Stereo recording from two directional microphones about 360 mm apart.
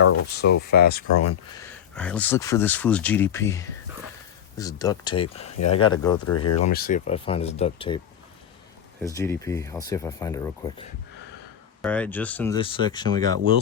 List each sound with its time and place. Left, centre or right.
0.3 s speech: left
2.0 s speech: centre
6.2 s speech: left
6.7 s speech: left